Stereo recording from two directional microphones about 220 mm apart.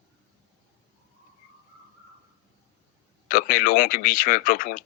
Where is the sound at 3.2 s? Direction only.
40° left (ahead or behind).